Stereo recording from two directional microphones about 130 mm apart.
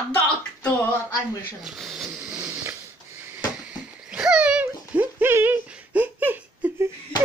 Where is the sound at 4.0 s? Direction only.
5° right (ahead or behind).